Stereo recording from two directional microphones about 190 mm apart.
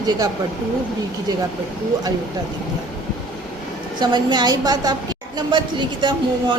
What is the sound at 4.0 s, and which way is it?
Speech, 20° right (ahead or behind).